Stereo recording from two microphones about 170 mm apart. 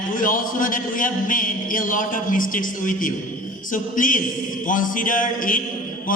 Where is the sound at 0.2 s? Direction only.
55° left (ahead or behind).